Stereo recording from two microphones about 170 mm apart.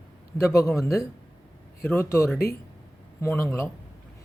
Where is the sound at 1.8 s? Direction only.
15° left (ahead or behind).